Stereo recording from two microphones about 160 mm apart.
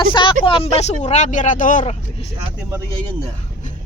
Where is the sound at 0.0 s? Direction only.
30° left (ahead or behind); by 2.0 s 50° left (ahead or behind).